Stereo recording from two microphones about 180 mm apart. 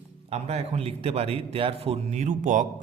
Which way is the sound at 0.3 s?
35° right (ahead or behind).